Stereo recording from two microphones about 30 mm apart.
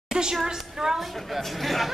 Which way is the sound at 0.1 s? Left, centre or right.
Right.